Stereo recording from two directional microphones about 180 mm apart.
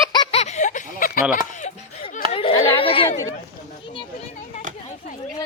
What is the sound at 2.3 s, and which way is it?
Chatter, 35° left (ahead or behind).